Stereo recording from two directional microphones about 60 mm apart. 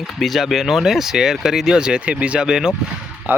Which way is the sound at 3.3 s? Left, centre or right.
Right.